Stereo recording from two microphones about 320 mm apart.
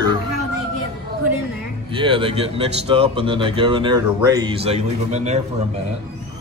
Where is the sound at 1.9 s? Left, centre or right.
Centre.